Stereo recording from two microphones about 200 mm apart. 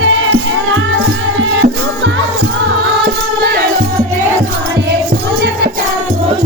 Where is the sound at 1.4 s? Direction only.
65° right (ahead or behind).